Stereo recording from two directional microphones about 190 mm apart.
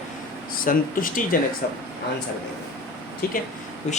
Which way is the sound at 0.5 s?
45° left (ahead or behind).